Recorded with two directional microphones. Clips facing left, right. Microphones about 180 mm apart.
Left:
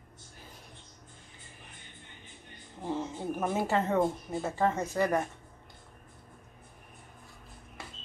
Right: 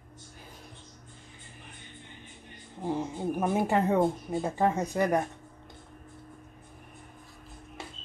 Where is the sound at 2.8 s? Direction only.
15° right (ahead or behind).